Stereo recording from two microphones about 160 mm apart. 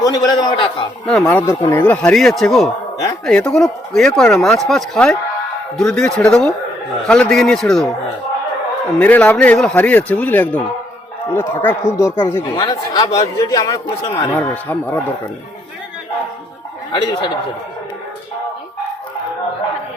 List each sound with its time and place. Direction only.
0.0 s a man's voice: 25° left (ahead or behind)
1.0 s speech: 5° left (ahead or behind)
9.0 s speech: 10° left (ahead or behind)
12.6 s a man's voice: 25° left (ahead or behind)
14.3 s speech: 10° left (ahead or behind)
16.9 s a man's voice: 30° left (ahead or behind)